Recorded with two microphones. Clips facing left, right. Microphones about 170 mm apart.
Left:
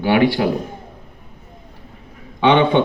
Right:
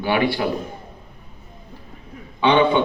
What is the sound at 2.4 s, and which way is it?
Speech, 70° left (ahead or behind).